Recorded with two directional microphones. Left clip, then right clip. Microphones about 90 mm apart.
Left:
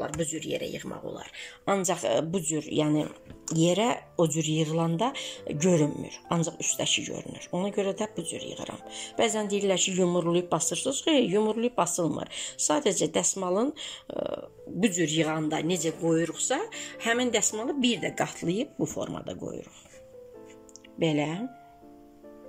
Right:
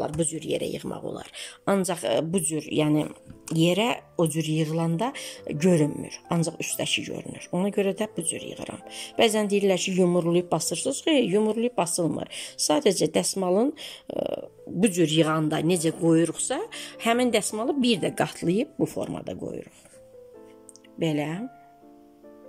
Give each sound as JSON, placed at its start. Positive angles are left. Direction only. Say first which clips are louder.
{"t": 0.0, "sound": "speech", "louder": "right 3 dB", "side_deg": -35}
{"t": 1.9, "sound": "speech", "louder": "right 1 dB", "side_deg": -15}
{"t": 21.0, "sound": "speech", "louder": "even", "side_deg": -5}